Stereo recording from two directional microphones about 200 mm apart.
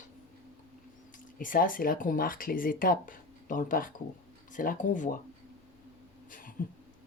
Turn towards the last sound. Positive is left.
turn(degrees=40)  # may be behind; listen again after turning